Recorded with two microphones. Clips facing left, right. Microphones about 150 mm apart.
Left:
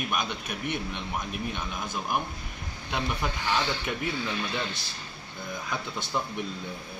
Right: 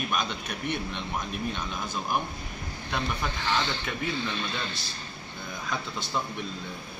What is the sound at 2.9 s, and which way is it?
Speech, 15° left (ahead or behind).